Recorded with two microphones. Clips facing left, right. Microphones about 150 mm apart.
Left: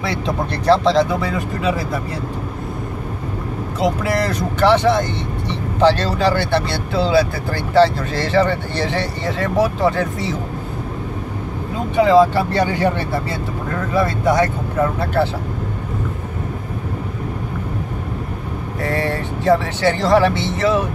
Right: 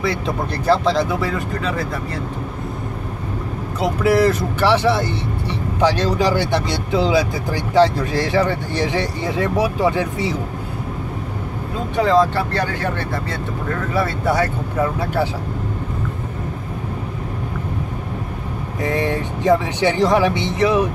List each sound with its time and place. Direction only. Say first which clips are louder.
0.7 s speech: left 3 dB; 5° right (ahead or behind)
3.8 s speech: right 3 dB; 5° right (ahead or behind)
12.0 s speech: left 4 dB; 10° left (ahead or behind)
13.9 s speech: left 3 dB; 5° right (ahead or behind)
18.9 s speech: right 1 dB; 15° right (ahead or behind)